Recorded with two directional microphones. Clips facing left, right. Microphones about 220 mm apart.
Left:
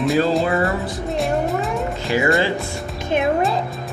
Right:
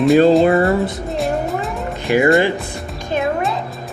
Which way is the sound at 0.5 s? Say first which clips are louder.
Right 6 dB; 30° right (ahead or behind).